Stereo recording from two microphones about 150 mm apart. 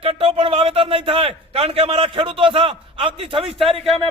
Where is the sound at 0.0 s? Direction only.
40° right (ahead or behind).